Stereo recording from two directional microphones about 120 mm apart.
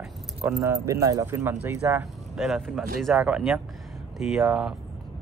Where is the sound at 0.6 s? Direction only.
25° right (ahead or behind).